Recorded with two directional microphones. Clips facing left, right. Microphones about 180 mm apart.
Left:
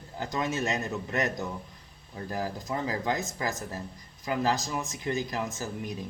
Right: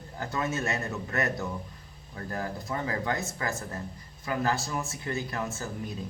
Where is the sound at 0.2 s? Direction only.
15° left (ahead or behind).